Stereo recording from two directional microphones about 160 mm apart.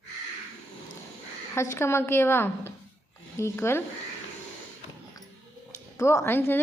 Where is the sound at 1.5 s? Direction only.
15° left (ahead or behind).